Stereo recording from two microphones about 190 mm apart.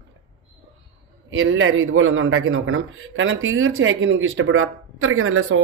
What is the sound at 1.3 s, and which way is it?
Speech, 90° right.